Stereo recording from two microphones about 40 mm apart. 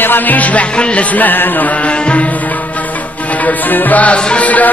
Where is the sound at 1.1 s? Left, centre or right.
Left.